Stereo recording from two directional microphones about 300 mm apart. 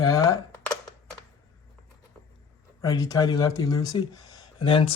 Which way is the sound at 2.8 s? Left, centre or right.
Centre.